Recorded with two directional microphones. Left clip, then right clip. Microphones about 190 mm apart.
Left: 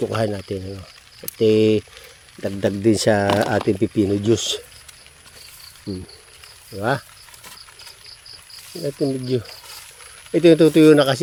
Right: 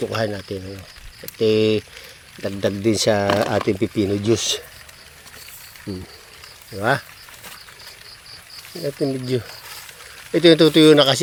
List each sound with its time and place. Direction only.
0.0 s speech: 35° left (ahead or behind)
6.7 s speech: 10° left (ahead or behind)
8.7 s speech: 10° left (ahead or behind)